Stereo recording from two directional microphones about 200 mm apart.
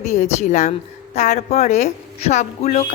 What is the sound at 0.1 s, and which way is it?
A woman's voice, 35° left (ahead or behind).